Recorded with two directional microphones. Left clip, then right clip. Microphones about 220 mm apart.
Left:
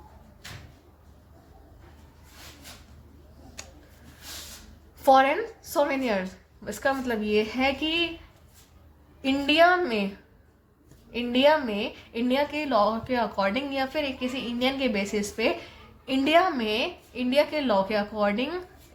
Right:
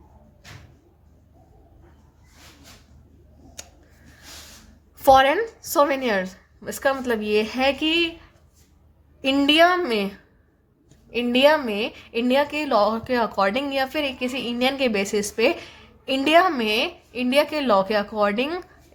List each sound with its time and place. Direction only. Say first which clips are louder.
5.0 s a woman's voice: right 4 dB; 35° right (ahead or behind)
9.2 s a woman's voice: right 4 dB; 40° right (ahead or behind)
11.1 s a woman's voice: right 4 dB; 35° right (ahead or behind)